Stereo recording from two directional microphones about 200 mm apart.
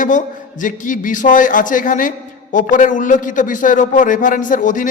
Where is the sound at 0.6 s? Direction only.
40° left (ahead or behind).